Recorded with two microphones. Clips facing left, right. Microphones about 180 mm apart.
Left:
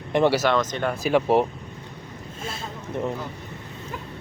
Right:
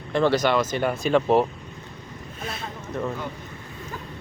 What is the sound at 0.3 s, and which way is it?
Speech, 5° right (ahead or behind).